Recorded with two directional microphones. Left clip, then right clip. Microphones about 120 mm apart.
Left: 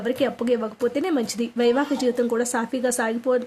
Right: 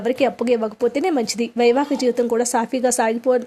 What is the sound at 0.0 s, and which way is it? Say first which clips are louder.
A woman's voice: right 4 dB; 30° right (ahead or behind).